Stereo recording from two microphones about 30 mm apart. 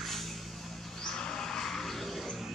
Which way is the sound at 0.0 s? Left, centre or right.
Centre.